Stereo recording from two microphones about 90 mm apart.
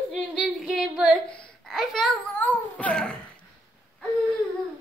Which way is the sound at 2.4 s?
15° left (ahead or behind).